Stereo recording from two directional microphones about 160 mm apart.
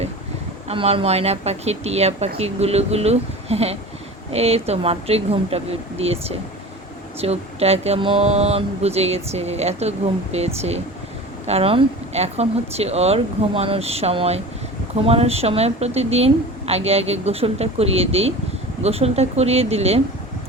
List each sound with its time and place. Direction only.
0.7 s a woman's voice: 35° right (ahead or behind)